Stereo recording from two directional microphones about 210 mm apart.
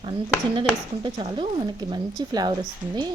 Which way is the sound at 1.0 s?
25° right (ahead or behind).